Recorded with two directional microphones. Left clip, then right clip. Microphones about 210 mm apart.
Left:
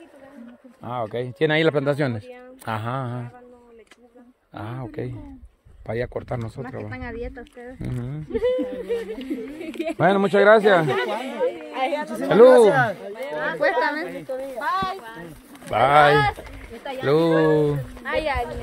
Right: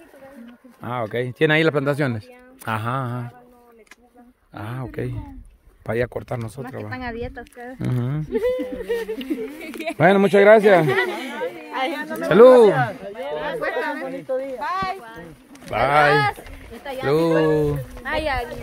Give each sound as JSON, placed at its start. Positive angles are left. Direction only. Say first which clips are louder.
{"t": 0.7, "sound": "speech", "louder": "right 2 dB", "side_deg": -25}
{"t": 2.6, "sound": "a sound", "louder": "right 3 dB", "side_deg": -15}
{"t": 4.6, "sound": "a sound", "louder": "right 1 dB", "side_deg": -15}
{"t": 4.9, "sound": "speech", "louder": "right 3 dB", "side_deg": -20}
{"t": 5.9, "sound": "speech", "louder": "right 3 dB", "side_deg": -30}
{"t": 6.8, "sound": "speech", "louder": "right 4 dB", "side_deg": -45}
{"t": 8.3, "sound": "speech", "louder": "even", "side_deg": -25}
{"t": 11.7, "sound": "speech", "louder": "even", "side_deg": -50}
{"t": 12.3, "sound": "speech", "louder": "right 2 dB", "side_deg": -20}
{"t": 13.6, "sound": "speech", "louder": "left 7 dB", "side_deg": 35}
{"t": 14.6, "sound": "speech", "louder": "even", "side_deg": 0}
{"t": 16.1, "sound": "speech", "louder": "even", "side_deg": -40}
{"t": 17.0, "sound": "speech", "louder": "even", "side_deg": -5}
{"t": 18.0, "sound": "speech", "louder": "even", "side_deg": -30}